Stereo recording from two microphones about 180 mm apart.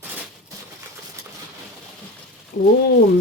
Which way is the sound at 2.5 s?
55° left (ahead or behind).